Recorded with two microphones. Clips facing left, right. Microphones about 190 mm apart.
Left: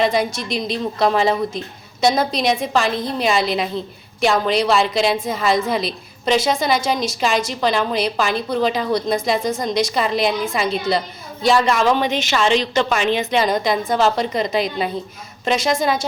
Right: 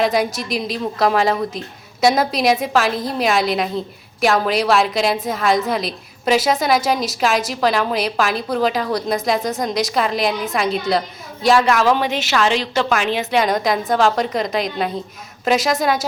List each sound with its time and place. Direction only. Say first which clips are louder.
0.0 s a woman's voice: even; centre (ahead or behind)